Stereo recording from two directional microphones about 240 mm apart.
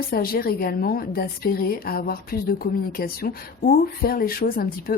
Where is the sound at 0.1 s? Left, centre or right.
Left.